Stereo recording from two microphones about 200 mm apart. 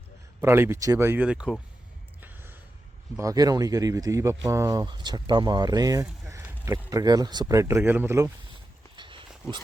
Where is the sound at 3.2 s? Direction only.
15° right (ahead or behind).